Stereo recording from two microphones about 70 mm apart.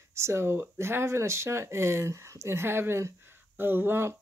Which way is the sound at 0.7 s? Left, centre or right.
Right.